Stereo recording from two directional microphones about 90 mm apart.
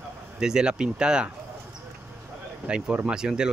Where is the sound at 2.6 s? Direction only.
10° right (ahead or behind).